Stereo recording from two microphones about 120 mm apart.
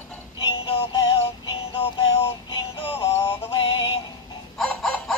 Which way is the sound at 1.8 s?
45° left (ahead or behind).